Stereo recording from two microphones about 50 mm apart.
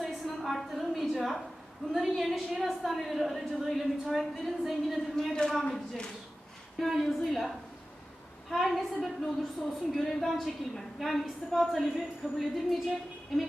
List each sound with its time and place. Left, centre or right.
0.3 s a sound: centre
1.9 s a woman's voice: centre
6.7 s a woman's voice: centre